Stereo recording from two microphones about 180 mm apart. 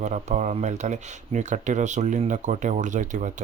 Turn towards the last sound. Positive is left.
turn(degrees=-45)  # may be behind; listen again after turning